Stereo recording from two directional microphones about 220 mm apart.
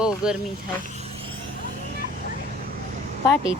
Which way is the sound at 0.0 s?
5° right (ahead or behind).